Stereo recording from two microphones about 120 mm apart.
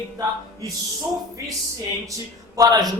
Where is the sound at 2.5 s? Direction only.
30° right (ahead or behind).